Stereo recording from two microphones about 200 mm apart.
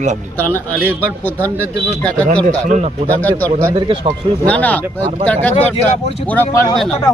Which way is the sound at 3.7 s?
25° right (ahead or behind).